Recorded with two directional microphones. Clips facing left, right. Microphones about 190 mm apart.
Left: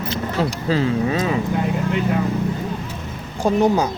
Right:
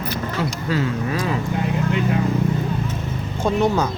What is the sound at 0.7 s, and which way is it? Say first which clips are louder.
Speech: left 4 dB; 25° left (ahead or behind).